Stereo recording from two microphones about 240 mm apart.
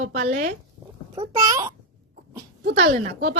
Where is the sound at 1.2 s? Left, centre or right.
Centre.